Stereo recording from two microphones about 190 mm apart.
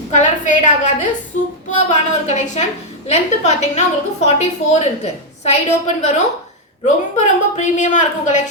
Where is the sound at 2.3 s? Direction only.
35° left (ahead or behind).